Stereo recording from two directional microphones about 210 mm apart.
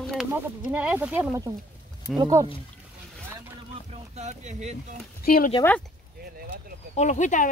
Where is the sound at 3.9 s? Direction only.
35° right (ahead or behind).